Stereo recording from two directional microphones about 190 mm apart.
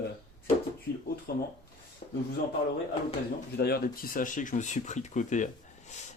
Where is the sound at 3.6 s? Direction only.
55° left (ahead or behind).